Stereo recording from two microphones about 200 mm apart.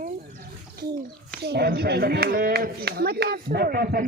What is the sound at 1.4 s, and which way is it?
Speech, 55° right (ahead or behind).